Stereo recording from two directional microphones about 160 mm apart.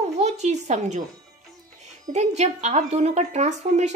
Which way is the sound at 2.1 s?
45° right (ahead or behind).